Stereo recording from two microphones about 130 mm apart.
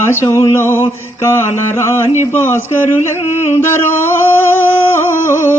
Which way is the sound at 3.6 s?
20° left (ahead or behind).